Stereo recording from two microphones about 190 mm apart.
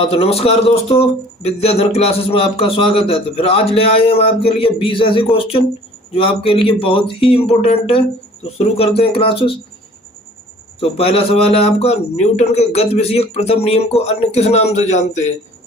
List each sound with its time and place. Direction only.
0.0 s speech: 30° left (ahead or behind)
10.8 s speech: 30° left (ahead or behind)